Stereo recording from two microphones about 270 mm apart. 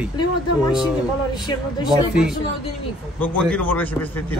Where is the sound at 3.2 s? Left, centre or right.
Centre.